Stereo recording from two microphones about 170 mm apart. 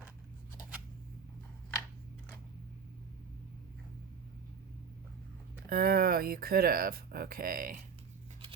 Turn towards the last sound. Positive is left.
turn(degrees=-55)  # may be behind; listen again after turning